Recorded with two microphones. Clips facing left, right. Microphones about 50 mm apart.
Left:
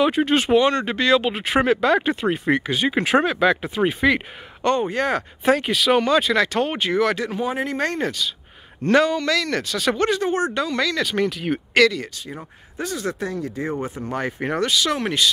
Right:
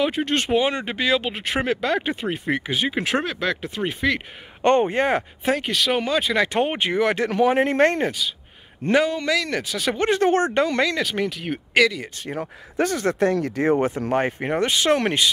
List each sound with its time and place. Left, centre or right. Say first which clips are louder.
0.0 s speech: left 4 dB; centre
0.6 s speech: left 4 dB; centre
4.6 s speech: right 2 dB; right
5.4 s speech: left 3 dB; centre; by 7.2 s right
7.2 s speech: right 6 dB; right
7.6 s speech: right 6 dB; right
8.0 s speech: even; centre
10.2 s speech: right 3 dB; right
11.0 s speech: left 2 dB; centre
12.3 s speech: right 6 dB; right
13.3 s speech: right 6 dB; right
14.4 s speech: even; centre
14.7 s speech: right 5 dB; right